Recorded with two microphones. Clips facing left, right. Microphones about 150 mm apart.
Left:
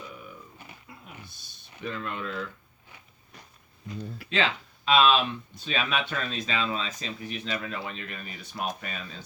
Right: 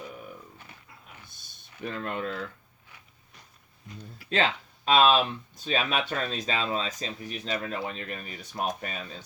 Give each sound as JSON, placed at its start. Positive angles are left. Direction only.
{"t": 1.8, "sound": "speech", "side_deg": -45}
{"t": 4.3, "sound": "speech", "side_deg": -45}